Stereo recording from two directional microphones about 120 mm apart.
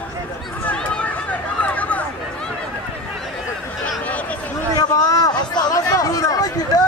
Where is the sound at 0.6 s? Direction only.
10° left (ahead or behind).